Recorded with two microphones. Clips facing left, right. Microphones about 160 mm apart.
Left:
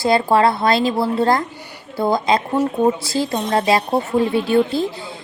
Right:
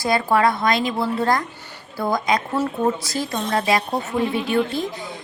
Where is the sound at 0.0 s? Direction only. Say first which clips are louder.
Left 3 dB; 30° left (ahead or behind).